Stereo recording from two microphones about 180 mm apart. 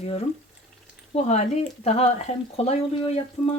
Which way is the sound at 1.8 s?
35° left (ahead or behind).